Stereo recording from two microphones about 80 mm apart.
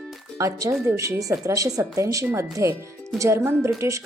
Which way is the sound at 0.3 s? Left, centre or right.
Right.